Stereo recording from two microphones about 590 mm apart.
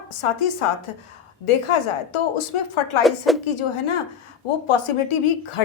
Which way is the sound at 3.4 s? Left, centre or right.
Left.